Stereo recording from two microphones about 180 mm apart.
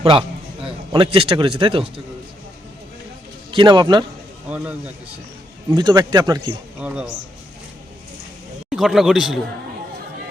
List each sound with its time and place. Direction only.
0.0 s speech: 30° right (ahead or behind)
3.5 s speech: 25° right (ahead or behind)
4.4 s speech: 5° right (ahead or behind)
5.7 s speech: 25° right (ahead or behind)
6.7 s a man's voice: 5° right (ahead or behind)
8.7 s a man's voice: centre (ahead or behind)